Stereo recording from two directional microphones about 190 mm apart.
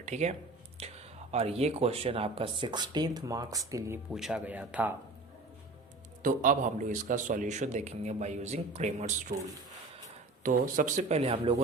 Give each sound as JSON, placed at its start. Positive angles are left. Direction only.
{"t": 0.0, "sound": "speech", "side_deg": -35}
{"t": 0.8, "sound": "whispering", "side_deg": -30}
{"t": 1.3, "sound": "speech", "side_deg": -35}
{"t": 4.1, "sound": "speech", "side_deg": 0}
{"t": 6.2, "sound": "a man's voice", "side_deg": -45}
{"t": 10.4, "sound": "a man's voice", "side_deg": -45}